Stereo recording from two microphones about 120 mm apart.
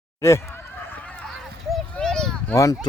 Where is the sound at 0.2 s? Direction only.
20° left (ahead or behind); by 2.6 s 5° left (ahead or behind).